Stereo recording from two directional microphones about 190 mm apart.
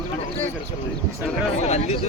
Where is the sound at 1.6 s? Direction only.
35° left (ahead or behind).